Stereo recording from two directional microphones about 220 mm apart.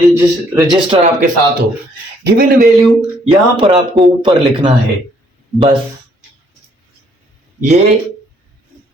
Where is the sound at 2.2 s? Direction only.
40° right (ahead or behind).